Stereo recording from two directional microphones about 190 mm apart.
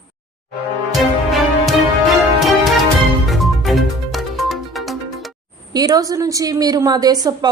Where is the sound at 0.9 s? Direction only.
Centre (ahead or behind).